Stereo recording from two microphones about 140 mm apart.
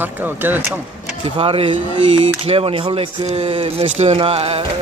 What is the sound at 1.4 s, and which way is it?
Speech, 40° right (ahead or behind).